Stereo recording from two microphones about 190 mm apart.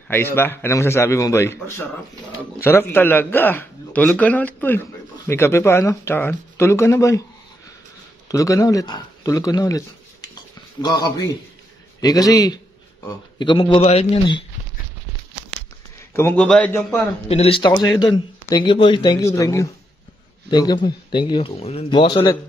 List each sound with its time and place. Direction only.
0.1 s a man's voice: 10° left (ahead or behind)
8.3 s a man's voice: 15° left (ahead or behind)
16.1 s a man's voice: 15° left (ahead or behind)
17.3 s speech: 30° left (ahead or behind)